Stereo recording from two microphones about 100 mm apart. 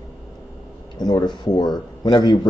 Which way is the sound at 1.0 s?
45° left (ahead or behind).